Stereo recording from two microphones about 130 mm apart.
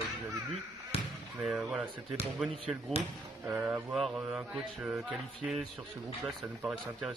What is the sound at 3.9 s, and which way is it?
Speech, centre (ahead or behind).